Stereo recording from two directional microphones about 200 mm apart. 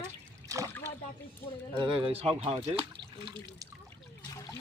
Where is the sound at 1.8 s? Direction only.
25° right (ahead or behind).